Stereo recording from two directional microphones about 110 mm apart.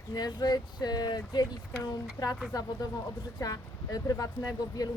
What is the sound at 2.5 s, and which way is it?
Speech, 35° left (ahead or behind).